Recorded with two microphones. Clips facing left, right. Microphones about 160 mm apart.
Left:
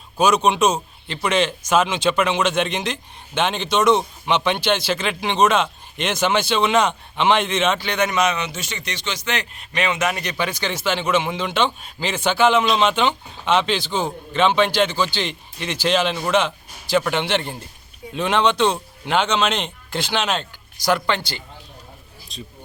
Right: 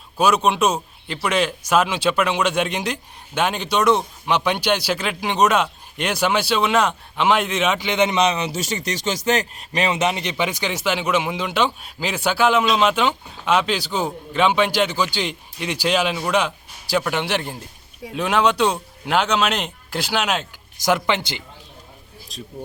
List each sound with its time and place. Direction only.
0.2 s a man's voice: 5° right (ahead or behind)
7.8 s a man's voice: 20° right (ahead or behind); by 20.5 s 5° right (ahead or behind)
20.8 s a man's voice: 15° right (ahead or behind)